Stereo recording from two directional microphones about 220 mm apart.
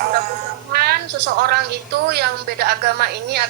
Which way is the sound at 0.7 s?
45° right (ahead or behind).